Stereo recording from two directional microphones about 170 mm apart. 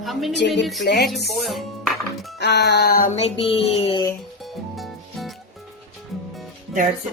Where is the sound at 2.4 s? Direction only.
85° left; by 3.1 s 65° left (ahead or behind).